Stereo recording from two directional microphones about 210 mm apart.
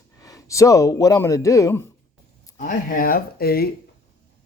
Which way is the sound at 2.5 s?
40° left (ahead or behind).